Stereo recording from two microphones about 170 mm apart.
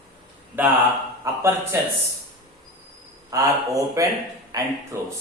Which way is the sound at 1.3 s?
20° right (ahead or behind).